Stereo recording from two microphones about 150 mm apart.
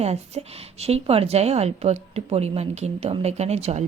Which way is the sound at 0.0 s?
45° right (ahead or behind).